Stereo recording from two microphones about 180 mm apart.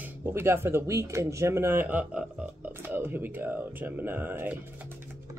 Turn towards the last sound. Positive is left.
turn(degrees=-10)  # may be behind; listen again after turning